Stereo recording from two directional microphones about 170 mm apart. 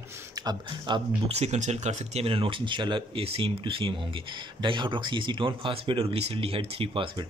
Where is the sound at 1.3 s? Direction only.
40° right (ahead or behind).